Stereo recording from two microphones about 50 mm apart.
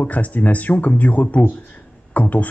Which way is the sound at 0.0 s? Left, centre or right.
Left.